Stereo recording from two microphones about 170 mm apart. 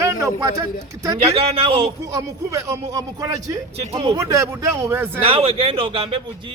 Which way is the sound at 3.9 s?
35° right (ahead or behind).